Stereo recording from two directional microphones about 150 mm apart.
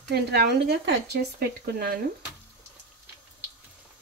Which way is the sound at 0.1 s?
90° right.